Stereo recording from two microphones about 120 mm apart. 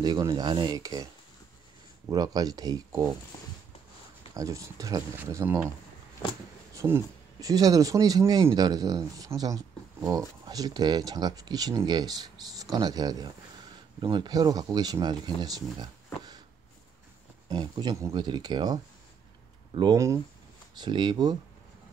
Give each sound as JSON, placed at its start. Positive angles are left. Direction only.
{"t": 0.0, "sound": "speech", "side_deg": -35}
{"t": 2.0, "sound": "speech", "side_deg": -30}
{"t": 4.3, "sound": "speech", "side_deg": -30}
{"t": 6.7, "sound": "speech", "side_deg": -25}
{"t": 17.5, "sound": "speech", "side_deg": -35}